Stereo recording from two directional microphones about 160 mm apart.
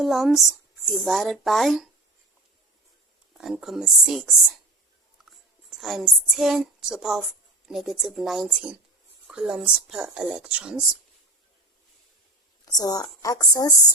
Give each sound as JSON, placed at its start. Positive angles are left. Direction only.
{"t": 0.0, "sound": "speech", "side_deg": 0}
{"t": 3.3, "sound": "speech", "side_deg": -5}
{"t": 5.7, "sound": "speech", "side_deg": 0}
{"t": 12.7, "sound": "a woman's voice", "side_deg": 25}